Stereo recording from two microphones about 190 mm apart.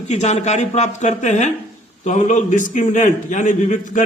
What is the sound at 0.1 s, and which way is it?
A man's voice, 35° left (ahead or behind).